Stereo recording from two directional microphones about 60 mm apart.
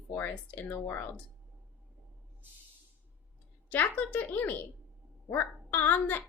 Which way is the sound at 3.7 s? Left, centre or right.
Left.